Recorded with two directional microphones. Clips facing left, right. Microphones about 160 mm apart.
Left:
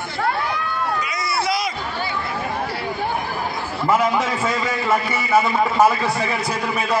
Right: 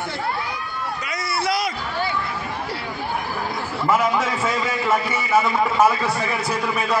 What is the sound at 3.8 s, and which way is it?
Speech, 15° left (ahead or behind).